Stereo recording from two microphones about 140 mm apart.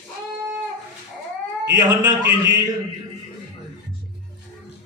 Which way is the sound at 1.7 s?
30° right (ahead or behind).